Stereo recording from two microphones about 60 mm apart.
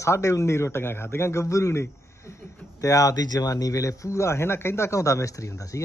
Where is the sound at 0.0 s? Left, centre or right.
Left.